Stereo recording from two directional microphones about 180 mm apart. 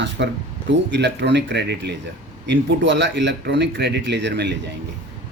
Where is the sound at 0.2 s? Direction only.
70° right (ahead or behind).